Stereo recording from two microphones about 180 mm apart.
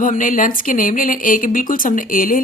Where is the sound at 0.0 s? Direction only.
45° left (ahead or behind).